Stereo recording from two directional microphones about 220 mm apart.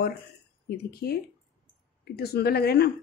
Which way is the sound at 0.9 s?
45° left (ahead or behind).